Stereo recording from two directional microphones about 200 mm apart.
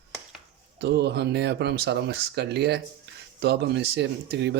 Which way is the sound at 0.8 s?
55° right (ahead or behind).